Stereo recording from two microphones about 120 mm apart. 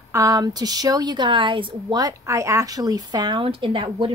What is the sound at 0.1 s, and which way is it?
A woman's voice, 30° right (ahead or behind).